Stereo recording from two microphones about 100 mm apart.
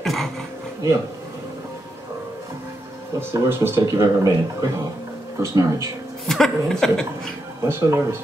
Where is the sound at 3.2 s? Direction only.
25° right (ahead or behind).